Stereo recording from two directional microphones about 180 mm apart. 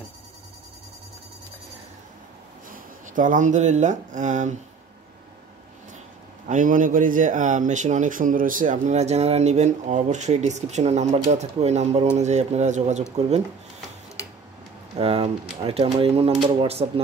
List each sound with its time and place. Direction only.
2.7 s speech: 45° right (ahead or behind)
6.5 s speech: 45° right (ahead or behind)
15.0 s speech: 30° right (ahead or behind)